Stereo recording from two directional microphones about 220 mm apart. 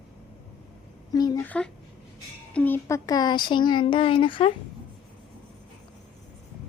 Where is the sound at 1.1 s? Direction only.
15° left (ahead or behind).